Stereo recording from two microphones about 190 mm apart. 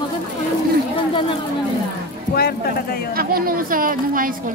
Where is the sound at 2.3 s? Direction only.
55° left (ahead or behind).